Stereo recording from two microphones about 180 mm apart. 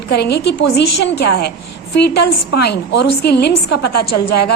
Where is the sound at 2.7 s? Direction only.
70° left (ahead or behind).